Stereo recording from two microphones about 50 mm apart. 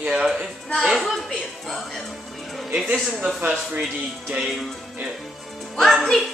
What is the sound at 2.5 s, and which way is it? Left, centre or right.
Music, centre.